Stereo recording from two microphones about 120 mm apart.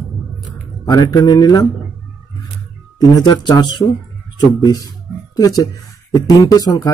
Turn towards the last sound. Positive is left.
turn(degrees=30)  # may be behind; listen again after turning